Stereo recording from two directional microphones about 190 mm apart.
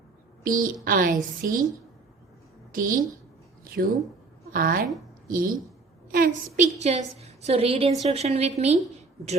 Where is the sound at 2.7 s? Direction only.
45° right (ahead or behind).